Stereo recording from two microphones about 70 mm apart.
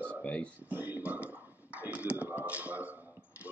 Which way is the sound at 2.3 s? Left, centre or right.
Right.